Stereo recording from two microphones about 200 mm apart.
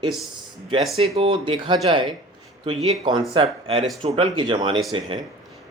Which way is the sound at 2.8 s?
Centre (ahead or behind).